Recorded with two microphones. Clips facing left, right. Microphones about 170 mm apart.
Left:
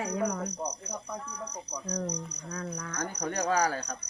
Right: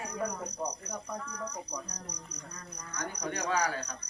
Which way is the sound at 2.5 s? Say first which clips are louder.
Left 11 dB; 65° left (ahead or behind).